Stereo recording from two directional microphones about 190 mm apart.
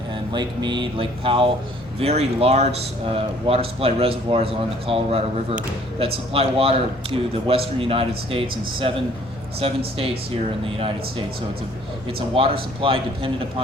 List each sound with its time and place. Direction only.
0.1 s a man's voice: 25° right (ahead or behind)
12.0 s a man's voice: 30° right (ahead or behind)